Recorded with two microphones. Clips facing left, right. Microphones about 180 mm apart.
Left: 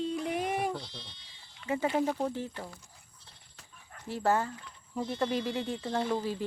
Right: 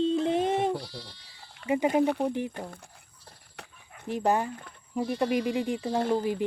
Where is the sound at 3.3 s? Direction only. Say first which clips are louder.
Right 12 dB; 65° right (ahead or behind).